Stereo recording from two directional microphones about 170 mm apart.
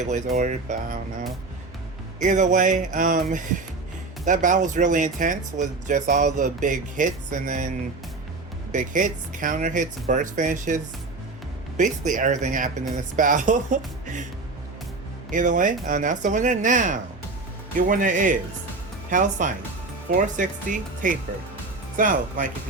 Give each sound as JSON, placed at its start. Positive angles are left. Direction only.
{"t": 0.0, "sound": "speech", "side_deg": -45}
{"t": 8.7, "sound": "speech", "side_deg": -50}
{"t": 11.8, "sound": "speech", "side_deg": -45}
{"t": 15.3, "sound": "speech", "side_deg": -50}